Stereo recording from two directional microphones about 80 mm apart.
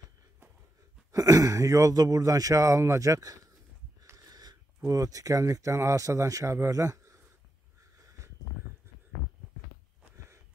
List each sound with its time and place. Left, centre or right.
1.1 s speech: right
4.2 s a sound: right
4.8 s speech: right